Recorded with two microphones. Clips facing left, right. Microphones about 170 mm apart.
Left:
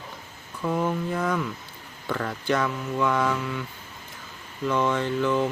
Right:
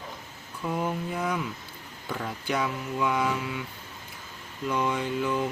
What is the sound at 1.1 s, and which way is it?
Mantra, 10° right (ahead or behind).